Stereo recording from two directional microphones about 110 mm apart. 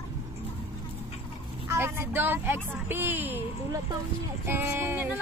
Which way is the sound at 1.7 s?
20° right (ahead or behind).